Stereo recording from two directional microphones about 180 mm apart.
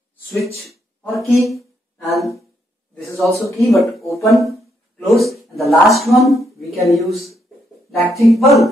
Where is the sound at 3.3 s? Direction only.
15° left (ahead or behind).